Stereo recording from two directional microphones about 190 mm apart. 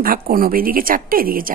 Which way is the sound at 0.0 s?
50° right (ahead or behind).